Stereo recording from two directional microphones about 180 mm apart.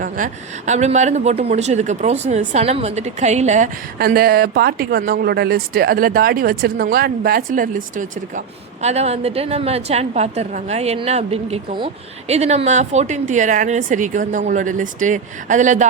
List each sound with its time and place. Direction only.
0.0 s a woman's voice: 45° right (ahead or behind)
3.9 s a woman's voice: 60° right (ahead or behind); by 15.9 s 45° right (ahead or behind)